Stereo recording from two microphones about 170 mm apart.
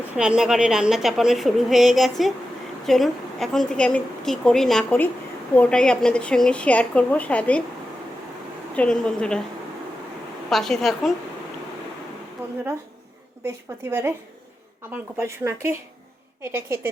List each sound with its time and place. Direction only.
0.2 s a woman's voice: 5° right (ahead or behind)
8.7 s a woman's voice: 5° left (ahead or behind)
10.5 s a woman's voice: centre (ahead or behind)
13.4 s speech: 15° right (ahead or behind)